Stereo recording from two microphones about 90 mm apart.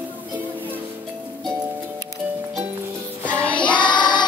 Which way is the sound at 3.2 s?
15° left (ahead or behind).